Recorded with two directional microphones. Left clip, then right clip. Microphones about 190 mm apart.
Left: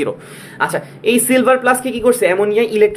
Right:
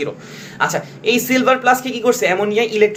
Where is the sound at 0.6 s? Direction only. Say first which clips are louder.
Left 1 dB; 25° left (ahead or behind).